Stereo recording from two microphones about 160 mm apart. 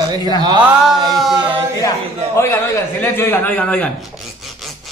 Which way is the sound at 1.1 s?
Centre (ahead or behind).